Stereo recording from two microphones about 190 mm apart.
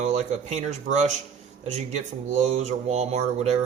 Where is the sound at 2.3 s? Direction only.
40° right (ahead or behind).